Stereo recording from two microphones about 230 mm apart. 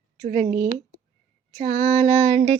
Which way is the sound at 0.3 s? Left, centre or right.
Right.